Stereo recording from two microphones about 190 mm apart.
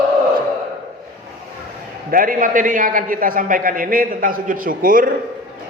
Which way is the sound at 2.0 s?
45° right (ahead or behind).